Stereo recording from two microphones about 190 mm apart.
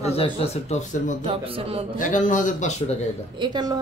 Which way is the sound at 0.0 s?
30° left (ahead or behind).